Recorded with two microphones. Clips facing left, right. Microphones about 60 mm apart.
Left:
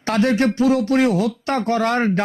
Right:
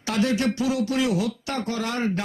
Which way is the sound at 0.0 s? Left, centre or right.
Left.